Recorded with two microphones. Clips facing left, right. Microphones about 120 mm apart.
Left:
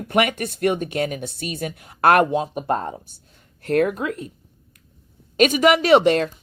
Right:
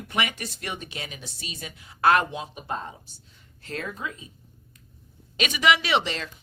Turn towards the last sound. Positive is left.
turn(degrees=55)  # may be behind; listen again after turning